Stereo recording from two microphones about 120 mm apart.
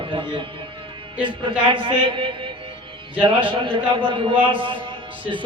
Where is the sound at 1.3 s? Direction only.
45° right (ahead or behind).